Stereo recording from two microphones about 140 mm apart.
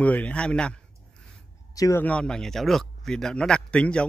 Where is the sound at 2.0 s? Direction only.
5° left (ahead or behind).